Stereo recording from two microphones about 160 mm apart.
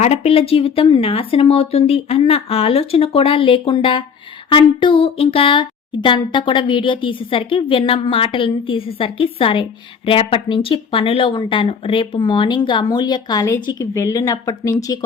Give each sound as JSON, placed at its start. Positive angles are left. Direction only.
{"t": 0.0, "sound": "speech", "side_deg": 40}